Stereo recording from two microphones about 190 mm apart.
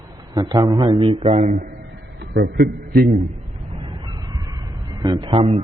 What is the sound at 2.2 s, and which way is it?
Speech, 60° right (ahead or behind).